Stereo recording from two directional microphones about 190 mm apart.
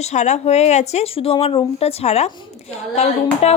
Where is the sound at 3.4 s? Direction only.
35° left (ahead or behind).